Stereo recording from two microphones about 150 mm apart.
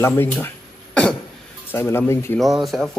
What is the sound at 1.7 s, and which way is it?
Speech, 15° left (ahead or behind).